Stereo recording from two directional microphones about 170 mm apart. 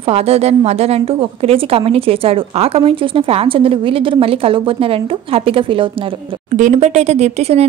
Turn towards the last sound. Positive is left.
turn(degrees=-40)  # may be behind; listen again after turning